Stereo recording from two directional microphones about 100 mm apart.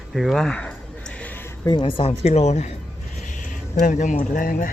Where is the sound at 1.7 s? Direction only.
55° left (ahead or behind); by 2.4 s 90° left.